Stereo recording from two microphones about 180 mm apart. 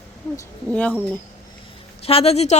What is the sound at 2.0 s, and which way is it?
Speech, 35° left (ahead or behind).